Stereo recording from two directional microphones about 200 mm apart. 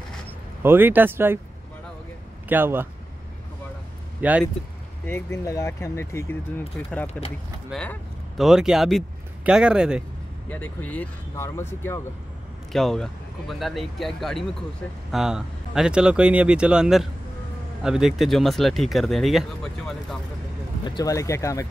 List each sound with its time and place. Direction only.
0.6 s speech: 10° right (ahead or behind)
2.4 s speech: 10° right (ahead or behind)
4.2 s speech: 5° right (ahead or behind)
5.0 s speech: 15° left (ahead or behind)
7.7 s speech: 5° left (ahead or behind)
10.5 s speech: 10° left (ahead or behind)
12.7 s speech: centre (ahead or behind)
20.8 s speech: 20° left (ahead or behind)